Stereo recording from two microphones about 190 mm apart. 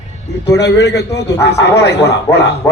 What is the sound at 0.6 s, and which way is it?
A man's voice, 60° left (ahead or behind).